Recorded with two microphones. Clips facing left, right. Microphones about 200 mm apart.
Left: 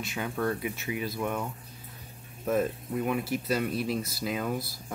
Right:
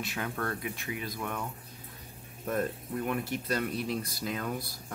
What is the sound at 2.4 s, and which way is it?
Speech, centre (ahead or behind).